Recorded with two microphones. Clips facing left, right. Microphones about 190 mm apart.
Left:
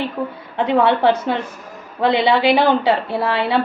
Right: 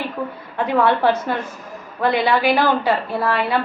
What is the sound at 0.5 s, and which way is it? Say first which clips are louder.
A woman's voice: left 2 dB; 20° left (ahead or behind).